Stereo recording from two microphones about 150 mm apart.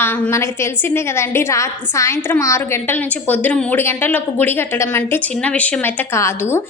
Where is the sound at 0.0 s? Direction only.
15° left (ahead or behind).